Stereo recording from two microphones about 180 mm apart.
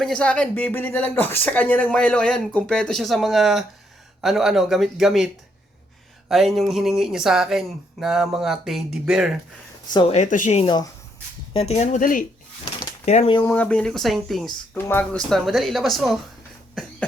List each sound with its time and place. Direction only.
0.0 s speech: 5° left (ahead or behind)
9.9 s speech: 30° left (ahead or behind)
10.2 s speech: 45° left (ahead or behind)
13.1 s speech: 40° left (ahead or behind)
13.5 s speech: 10° left (ahead or behind)
14.8 s speech: 10° left (ahead or behind)
15.3 s speech: centre (ahead or behind)
16.8 s cough: centre (ahead or behind)